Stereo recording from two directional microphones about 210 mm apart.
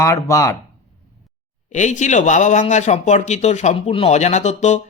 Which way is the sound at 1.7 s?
35° left (ahead or behind).